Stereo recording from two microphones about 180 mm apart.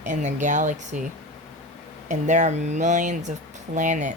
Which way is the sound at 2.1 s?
40° right (ahead or behind).